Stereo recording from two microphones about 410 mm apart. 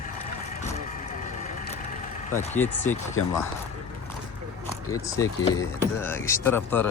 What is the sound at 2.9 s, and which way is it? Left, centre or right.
Speech, centre.